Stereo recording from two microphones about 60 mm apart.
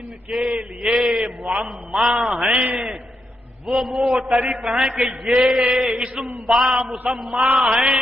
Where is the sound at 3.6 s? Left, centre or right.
Centre.